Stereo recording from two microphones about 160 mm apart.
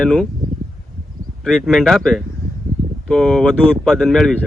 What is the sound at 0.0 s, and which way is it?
Speech, 5° left (ahead or behind).